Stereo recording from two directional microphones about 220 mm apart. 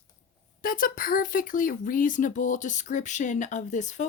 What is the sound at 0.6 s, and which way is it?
Speech, 40° left (ahead or behind).